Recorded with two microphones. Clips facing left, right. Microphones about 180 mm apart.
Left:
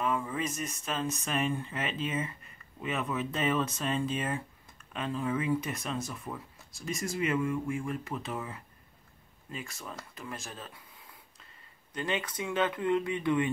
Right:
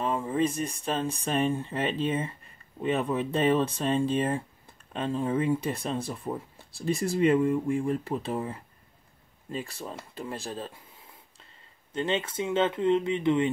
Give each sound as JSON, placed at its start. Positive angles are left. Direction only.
{"t": 0.0, "sound": "speech", "side_deg": -25}
{"t": 11.9, "sound": "speech", "side_deg": -25}